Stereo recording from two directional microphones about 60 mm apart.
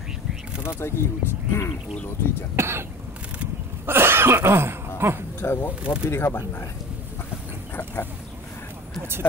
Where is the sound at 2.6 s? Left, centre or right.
Right.